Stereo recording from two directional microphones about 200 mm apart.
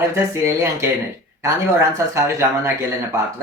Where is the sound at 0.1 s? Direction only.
15° right (ahead or behind).